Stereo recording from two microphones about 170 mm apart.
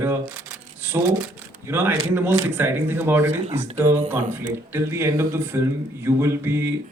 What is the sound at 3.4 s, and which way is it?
Speech, 40° right (ahead or behind).